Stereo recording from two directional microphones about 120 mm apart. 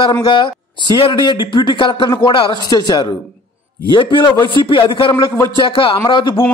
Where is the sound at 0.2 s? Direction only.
40° left (ahead or behind).